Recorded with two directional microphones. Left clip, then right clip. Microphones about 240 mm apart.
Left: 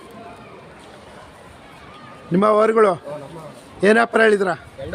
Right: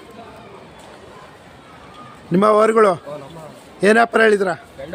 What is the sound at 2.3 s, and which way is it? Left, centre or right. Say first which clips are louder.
A man's voice: right 2 dB; centre.